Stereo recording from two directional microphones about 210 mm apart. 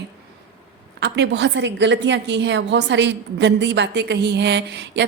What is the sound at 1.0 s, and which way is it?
A woman's voice, 55° right (ahead or behind).